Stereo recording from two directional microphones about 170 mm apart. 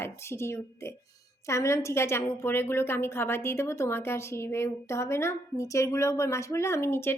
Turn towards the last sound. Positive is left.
turn(degrees=15)  # may be behind; listen again after turning